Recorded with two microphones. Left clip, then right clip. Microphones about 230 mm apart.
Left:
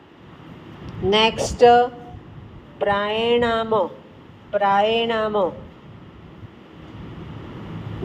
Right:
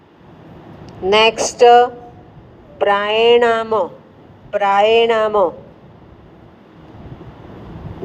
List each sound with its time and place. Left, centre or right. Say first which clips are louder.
0.9 s a woman's voice: right 5 dB; right